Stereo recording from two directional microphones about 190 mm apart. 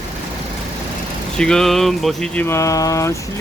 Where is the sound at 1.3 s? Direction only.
5° left (ahead or behind).